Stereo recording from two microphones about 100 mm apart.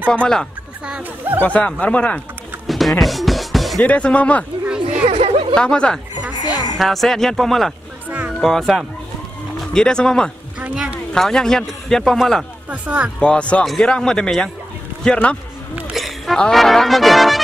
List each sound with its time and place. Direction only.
0.1 s speech: 10° left (ahead or behind)
2.6 s music: centre (ahead or behind)
3.8 s speech: 15° left (ahead or behind)
4.6 s a sound: 10° right (ahead or behind)
5.5 s speech: 10° left (ahead or behind)
6.3 s music: 40° left (ahead or behind)
6.8 s a man's voice: centre (ahead or behind)
12.6 s speech: 15° right (ahead or behind)
13.2 s speech: 10° left (ahead or behind)
15.9 s a sound: centre (ahead or behind)
16.3 s a man's voice: 5° left (ahead or behind)